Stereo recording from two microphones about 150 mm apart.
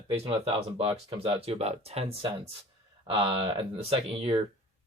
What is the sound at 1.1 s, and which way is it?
Speech, 40° right (ahead or behind).